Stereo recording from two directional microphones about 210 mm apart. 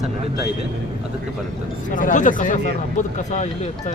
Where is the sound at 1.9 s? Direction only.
40° left (ahead or behind).